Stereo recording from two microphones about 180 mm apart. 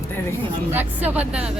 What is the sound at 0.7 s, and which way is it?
Speech, 10° right (ahead or behind).